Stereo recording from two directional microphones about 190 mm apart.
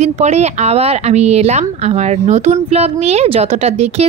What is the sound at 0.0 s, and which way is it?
Speech, 35° right (ahead or behind).